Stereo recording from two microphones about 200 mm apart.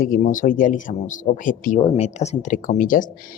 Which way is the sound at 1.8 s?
30° left (ahead or behind).